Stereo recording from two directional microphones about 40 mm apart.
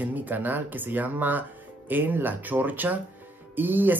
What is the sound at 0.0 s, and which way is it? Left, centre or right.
Speech, right.